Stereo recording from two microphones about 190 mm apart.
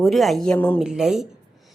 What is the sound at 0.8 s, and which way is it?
Speech, 5° right (ahead or behind).